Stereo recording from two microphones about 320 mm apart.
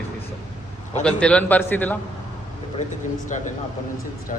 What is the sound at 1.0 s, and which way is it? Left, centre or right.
Speech, centre.